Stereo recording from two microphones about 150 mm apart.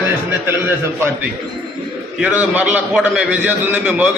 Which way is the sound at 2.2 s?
10° right (ahead or behind).